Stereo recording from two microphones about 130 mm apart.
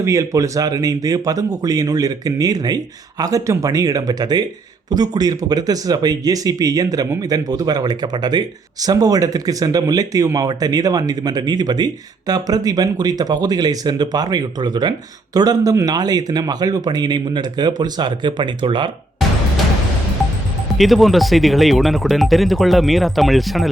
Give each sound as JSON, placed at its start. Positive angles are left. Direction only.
{"t": 0.0, "sound": "speech", "side_deg": -25}
{"t": 20.7, "sound": "speech", "side_deg": 0}